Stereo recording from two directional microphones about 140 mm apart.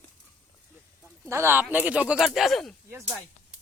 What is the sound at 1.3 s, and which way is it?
Speech, 20° right (ahead or behind).